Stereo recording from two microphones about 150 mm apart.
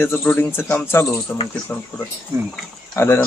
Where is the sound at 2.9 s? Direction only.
15° left (ahead or behind).